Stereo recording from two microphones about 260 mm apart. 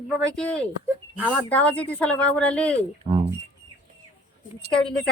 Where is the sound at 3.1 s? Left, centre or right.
Centre.